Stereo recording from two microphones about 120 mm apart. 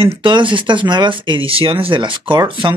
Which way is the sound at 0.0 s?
50° right (ahead or behind).